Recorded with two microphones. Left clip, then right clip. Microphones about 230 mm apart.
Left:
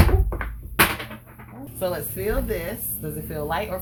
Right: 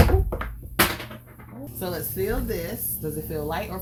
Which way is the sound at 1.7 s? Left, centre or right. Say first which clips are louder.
Left 3 dB; left.